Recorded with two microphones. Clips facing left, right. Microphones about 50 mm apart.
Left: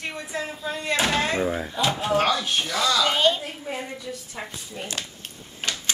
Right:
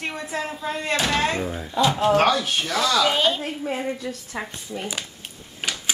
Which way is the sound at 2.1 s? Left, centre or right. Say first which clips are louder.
Right 3 dB; right.